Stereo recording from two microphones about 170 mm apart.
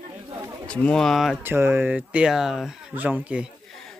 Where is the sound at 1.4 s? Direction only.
15° right (ahead or behind).